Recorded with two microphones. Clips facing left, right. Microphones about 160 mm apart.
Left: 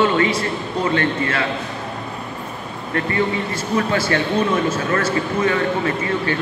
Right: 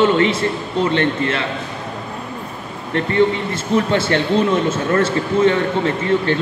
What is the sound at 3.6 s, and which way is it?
A man's voice, 25° right (ahead or behind).